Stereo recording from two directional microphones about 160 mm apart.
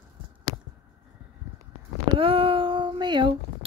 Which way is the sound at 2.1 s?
35° right (ahead or behind).